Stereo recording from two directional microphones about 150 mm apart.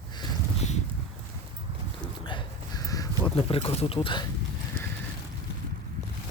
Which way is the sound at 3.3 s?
40° left (ahead or behind).